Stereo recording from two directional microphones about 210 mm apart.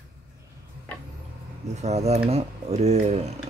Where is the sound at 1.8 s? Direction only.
30° right (ahead or behind).